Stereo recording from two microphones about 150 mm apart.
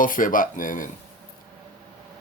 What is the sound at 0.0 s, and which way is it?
Speech, 65° left (ahead or behind).